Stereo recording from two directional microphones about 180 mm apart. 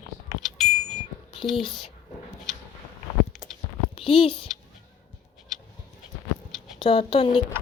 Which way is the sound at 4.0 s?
30° left (ahead or behind).